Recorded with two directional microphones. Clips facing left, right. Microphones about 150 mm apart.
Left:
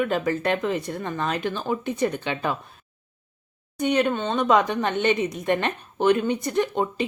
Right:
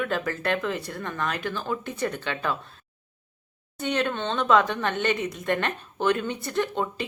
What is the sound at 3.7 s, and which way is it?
Speech, 15° left (ahead or behind).